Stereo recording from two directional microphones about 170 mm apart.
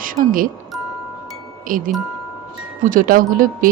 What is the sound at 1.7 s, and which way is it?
A woman's voice, 55° right (ahead or behind).